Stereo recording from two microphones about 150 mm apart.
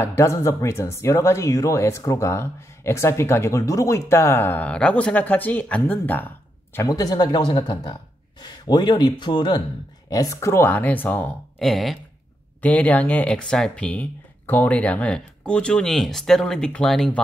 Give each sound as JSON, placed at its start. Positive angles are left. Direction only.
{"t": 0.0, "sound": "speech", "side_deg": 20}
{"t": 10.0, "sound": "speech", "side_deg": 20}
{"t": 11.6, "sound": "a sound", "side_deg": 0}
{"t": 12.6, "sound": "speech", "side_deg": 10}